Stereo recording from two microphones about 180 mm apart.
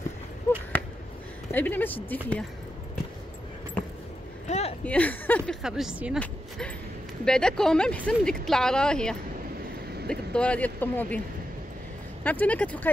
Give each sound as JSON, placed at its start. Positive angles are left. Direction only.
{"t": 1.5, "sound": "speech", "side_deg": 10}
{"t": 4.5, "sound": "a sound", "side_deg": 35}
{"t": 4.8, "sound": "speech", "side_deg": 10}
{"t": 5.6, "sound": "speech", "side_deg": -5}
{"t": 7.2, "sound": "speech", "side_deg": 5}
{"t": 12.2, "sound": "speech", "side_deg": 10}